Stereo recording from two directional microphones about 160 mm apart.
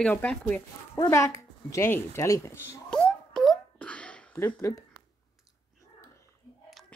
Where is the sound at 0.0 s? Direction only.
5° left (ahead or behind).